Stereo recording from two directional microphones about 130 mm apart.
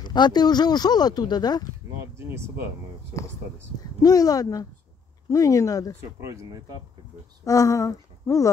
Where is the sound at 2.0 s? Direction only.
20° right (ahead or behind).